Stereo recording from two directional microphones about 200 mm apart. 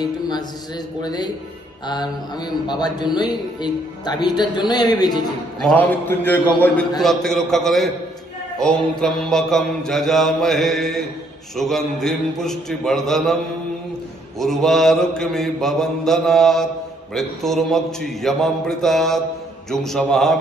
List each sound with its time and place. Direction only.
1.0 s speech: 20° left (ahead or behind)
2.6 s speech: 20° left (ahead or behind)
5.6 s a man's voice: 5° left (ahead or behind)
7.0 s mantra: centre (ahead or behind)
14.4 s mantra: centre (ahead or behind)